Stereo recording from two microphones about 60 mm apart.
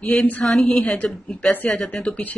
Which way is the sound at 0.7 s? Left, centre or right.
Left.